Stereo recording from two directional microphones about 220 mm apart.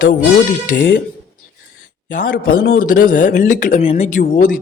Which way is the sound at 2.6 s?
40° left (ahead or behind).